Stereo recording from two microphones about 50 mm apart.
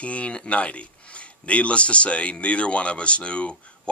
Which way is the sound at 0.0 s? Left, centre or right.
Left.